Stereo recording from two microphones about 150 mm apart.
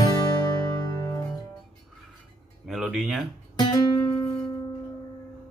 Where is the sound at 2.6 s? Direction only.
Centre (ahead or behind).